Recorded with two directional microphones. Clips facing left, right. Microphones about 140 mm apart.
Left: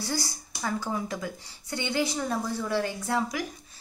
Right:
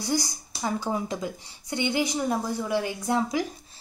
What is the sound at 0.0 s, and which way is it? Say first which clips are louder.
A woman's voice: right 4 dB; 15° right (ahead or behind).